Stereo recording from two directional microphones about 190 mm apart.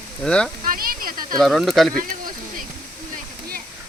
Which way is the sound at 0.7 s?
50° right (ahead or behind).